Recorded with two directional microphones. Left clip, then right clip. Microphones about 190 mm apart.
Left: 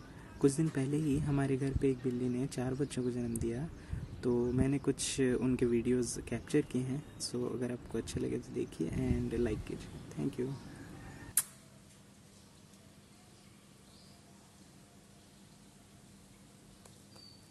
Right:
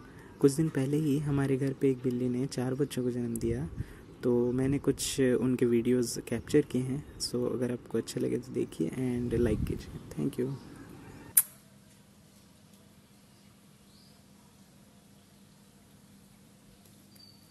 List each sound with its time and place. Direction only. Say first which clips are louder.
0.4 s speech: right 5 dB; 15° right (ahead or behind)